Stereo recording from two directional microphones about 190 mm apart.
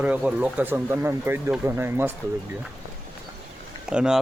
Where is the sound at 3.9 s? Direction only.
5° right (ahead or behind).